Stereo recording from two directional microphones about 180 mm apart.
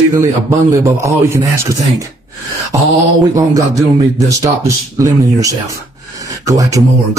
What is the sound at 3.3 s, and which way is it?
A man's voice, 20° right (ahead or behind).